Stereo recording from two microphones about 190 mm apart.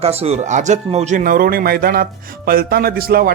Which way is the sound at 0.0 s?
30° right (ahead or behind).